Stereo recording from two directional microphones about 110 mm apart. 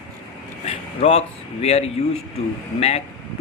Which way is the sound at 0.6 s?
75° left (ahead or behind).